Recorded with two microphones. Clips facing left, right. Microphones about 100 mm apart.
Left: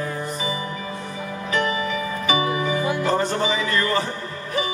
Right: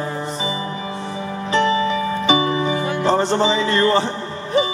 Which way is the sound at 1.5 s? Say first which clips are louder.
Right 6 dB; 30° right (ahead or behind).